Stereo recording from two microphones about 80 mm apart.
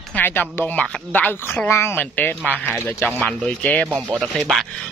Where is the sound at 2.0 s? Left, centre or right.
Left.